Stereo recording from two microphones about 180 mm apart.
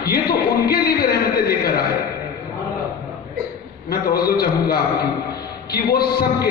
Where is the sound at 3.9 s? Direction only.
60° left (ahead or behind).